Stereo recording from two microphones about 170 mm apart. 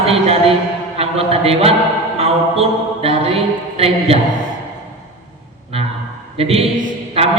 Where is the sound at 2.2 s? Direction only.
35° right (ahead or behind).